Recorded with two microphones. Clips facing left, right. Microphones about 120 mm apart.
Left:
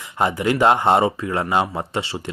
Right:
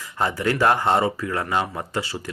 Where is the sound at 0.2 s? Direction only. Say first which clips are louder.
Left 3 dB; 20° left (ahead or behind).